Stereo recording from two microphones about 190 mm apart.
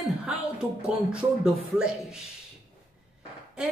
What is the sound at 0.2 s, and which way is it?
A woman's voice, 5° right (ahead or behind).